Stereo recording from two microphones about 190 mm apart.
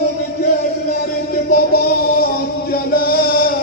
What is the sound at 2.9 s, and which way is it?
Music, 50° left (ahead or behind).